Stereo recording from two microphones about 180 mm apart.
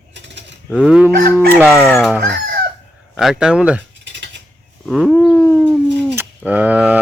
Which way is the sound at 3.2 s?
5° right (ahead or behind).